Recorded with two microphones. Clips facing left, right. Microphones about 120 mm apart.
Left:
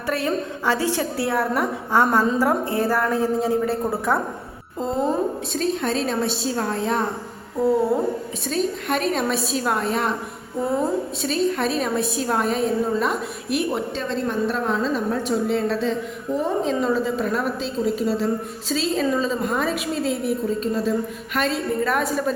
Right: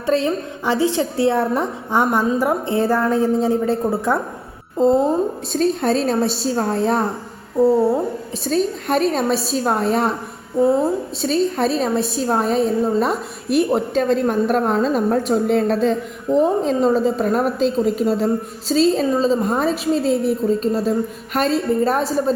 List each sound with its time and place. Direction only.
0.0 s a woman's voice: 25° right (ahead or behind)
4.8 s a woman's voice: 35° right (ahead or behind)
7.6 s speech: 5° right (ahead or behind)
8.4 s a woman's voice: 35° right (ahead or behind)
11.2 s a woman's voice: 35° right (ahead or behind)